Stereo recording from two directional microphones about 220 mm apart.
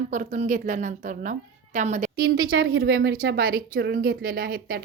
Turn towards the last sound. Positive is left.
turn(degrees=-40)  # may be behind; listen again after turning